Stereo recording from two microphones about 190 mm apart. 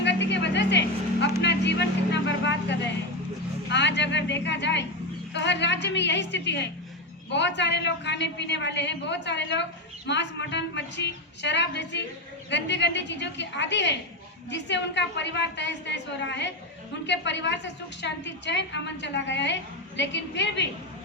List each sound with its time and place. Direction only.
0.0 s vehicle: 70° left (ahead or behind)
3.7 s a woman's voice: 65° left (ahead or behind)